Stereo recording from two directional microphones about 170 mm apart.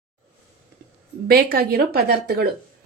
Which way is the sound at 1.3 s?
65° right (ahead or behind).